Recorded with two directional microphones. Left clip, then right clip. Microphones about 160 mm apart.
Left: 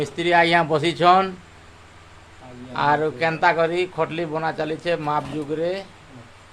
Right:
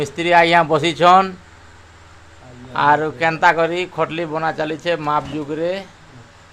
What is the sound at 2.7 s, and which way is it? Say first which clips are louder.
A man's voice: right 5 dB; 20° right (ahead or behind).